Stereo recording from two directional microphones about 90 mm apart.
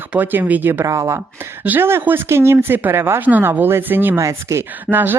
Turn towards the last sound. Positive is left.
turn(degrees=-20)  # may be behind; listen again after turning